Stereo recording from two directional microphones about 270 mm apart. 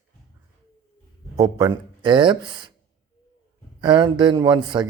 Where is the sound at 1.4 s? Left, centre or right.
Centre.